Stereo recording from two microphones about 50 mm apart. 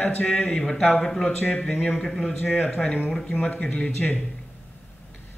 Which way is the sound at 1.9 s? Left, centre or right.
Centre.